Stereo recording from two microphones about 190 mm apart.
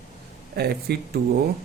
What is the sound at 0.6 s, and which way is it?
Speech, 55° right (ahead or behind).